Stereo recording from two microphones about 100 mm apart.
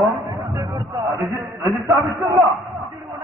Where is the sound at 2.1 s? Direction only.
Centre (ahead or behind).